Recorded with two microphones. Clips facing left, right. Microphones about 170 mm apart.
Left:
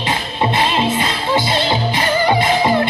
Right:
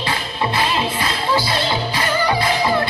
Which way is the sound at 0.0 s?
25° left (ahead or behind).